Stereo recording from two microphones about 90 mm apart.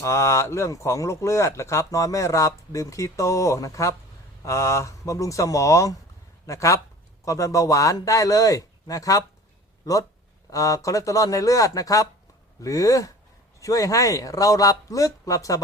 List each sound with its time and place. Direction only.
0.0 s a man's voice: 30° left (ahead or behind)